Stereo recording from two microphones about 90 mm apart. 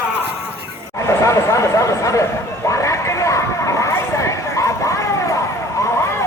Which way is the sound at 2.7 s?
35° left (ahead or behind).